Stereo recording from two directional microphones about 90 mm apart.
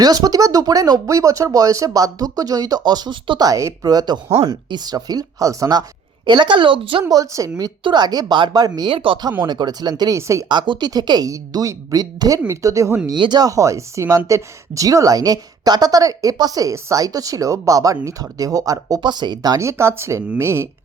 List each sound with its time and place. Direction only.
0.0 s speech: 50° right (ahead or behind)
3.4 s speech: 35° right (ahead or behind)
6.2 s a woman's voice: 60° right (ahead or behind)
7.1 s speech: 40° right (ahead or behind)
7.9 s speech: 55° right (ahead or behind)
8.9 s speech: 80° right
9.5 s speech: 50° right (ahead or behind)
10.2 s speech: 35° right (ahead or behind)
10.5 s speech: 55° right (ahead or behind)
11.3 s speech: 40° right (ahead or behind)
13.1 s a woman's voice: 55° right (ahead or behind)
13.5 s speech: 35° right (ahead or behind)
18.9 s speech: 55° right (ahead or behind)
19.6 s speech: 30° right (ahead or behind)